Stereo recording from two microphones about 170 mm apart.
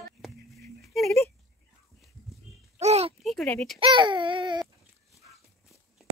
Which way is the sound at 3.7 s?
30° right (ahead or behind).